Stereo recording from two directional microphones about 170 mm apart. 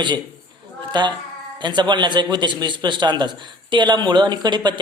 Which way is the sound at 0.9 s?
25° right (ahead or behind).